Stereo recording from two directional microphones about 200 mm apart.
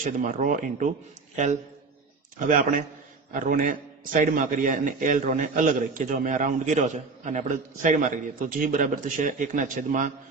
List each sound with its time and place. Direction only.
0.0 s a man's voice: 40° right (ahead or behind)
2.4 s a man's voice: 40° right (ahead or behind)